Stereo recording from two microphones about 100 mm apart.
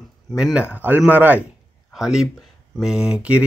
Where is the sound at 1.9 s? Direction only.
5° right (ahead or behind).